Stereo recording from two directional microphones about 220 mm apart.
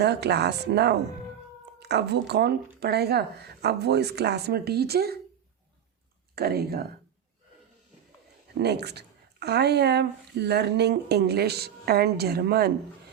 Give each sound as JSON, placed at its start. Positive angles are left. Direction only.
{"t": 0.0, "sound": "a woman's voice", "side_deg": -50}
{"t": 6.3, "sound": "a woman's voice", "side_deg": -45}
{"t": 8.5, "sound": "a woman's voice", "side_deg": -50}